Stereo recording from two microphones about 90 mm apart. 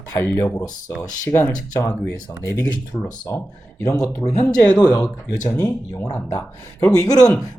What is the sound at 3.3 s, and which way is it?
Speech, 35° left (ahead or behind).